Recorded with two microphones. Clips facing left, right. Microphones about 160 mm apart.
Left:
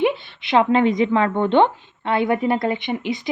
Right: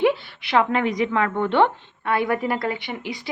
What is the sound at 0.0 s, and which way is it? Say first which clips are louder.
A woman's voice: even; 20° left (ahead or behind).